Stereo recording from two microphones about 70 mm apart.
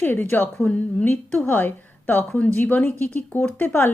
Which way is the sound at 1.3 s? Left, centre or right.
Left.